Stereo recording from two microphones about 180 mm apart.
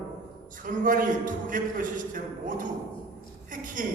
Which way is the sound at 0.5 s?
50° right (ahead or behind).